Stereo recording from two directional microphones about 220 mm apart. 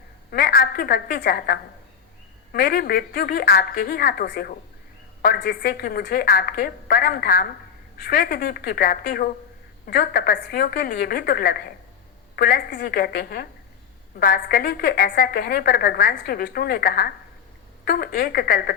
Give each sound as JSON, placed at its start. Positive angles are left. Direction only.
{"t": 0.3, "sound": "a woman's voice", "side_deg": 45}